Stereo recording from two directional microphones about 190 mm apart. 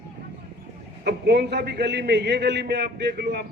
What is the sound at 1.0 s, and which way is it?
A man's voice, 60° right (ahead or behind).